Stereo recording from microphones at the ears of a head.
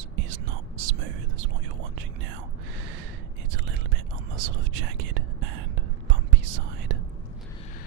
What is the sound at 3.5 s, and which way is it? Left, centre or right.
Whispering, right.